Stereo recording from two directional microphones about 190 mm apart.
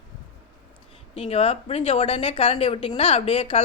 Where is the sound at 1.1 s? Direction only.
30° left (ahead or behind).